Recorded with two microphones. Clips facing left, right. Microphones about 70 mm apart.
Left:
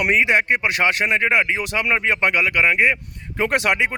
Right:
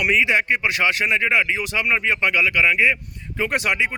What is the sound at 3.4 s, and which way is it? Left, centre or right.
Speech, left.